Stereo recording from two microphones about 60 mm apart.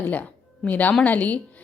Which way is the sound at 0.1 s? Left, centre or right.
Left.